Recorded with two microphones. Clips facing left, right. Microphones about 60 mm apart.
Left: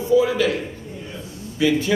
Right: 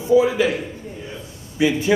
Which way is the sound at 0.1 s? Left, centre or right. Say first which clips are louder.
Right 2 dB; right.